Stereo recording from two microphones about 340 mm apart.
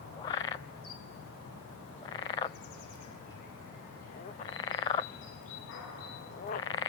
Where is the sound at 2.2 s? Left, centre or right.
Centre.